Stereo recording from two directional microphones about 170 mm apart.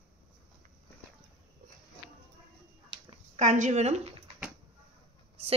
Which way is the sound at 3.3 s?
45° right (ahead or behind).